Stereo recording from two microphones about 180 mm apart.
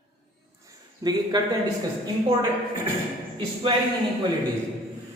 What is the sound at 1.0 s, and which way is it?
Speech, 20° right (ahead or behind).